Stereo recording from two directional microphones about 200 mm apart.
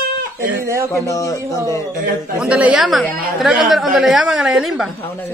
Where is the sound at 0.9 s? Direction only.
15° left (ahead or behind).